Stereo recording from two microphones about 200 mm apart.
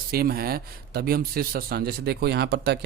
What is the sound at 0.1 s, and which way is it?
Speech, 50° right (ahead or behind).